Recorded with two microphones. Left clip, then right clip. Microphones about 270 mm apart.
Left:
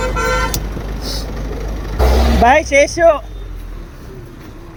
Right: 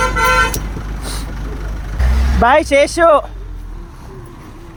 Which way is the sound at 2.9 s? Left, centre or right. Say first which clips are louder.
Right 1 dB; centre.